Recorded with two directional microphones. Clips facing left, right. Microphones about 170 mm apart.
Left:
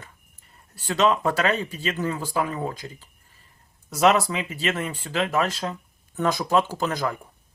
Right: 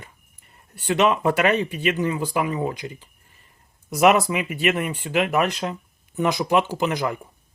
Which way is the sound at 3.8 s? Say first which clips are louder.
Right 2 dB; 15° right (ahead or behind).